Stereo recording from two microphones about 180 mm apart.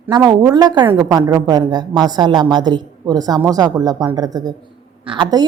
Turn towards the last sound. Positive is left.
turn(degrees=-25)  # may be behind; listen again after turning